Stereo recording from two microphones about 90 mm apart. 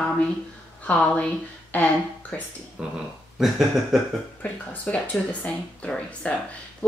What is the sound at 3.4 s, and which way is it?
Speech, 5° right (ahead or behind).